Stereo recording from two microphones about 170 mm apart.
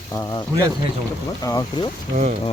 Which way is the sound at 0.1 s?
20° left (ahead or behind).